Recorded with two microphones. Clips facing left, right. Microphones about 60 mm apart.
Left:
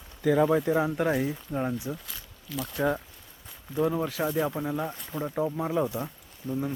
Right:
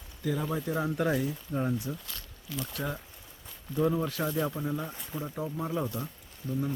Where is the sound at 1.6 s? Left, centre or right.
Left.